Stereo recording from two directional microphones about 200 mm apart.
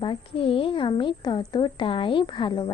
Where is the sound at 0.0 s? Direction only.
25° left (ahead or behind).